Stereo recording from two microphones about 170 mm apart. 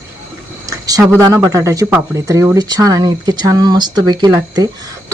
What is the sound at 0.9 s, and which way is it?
Speech, 20° right (ahead or behind).